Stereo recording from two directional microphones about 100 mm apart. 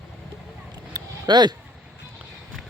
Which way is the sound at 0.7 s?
45° right (ahead or behind).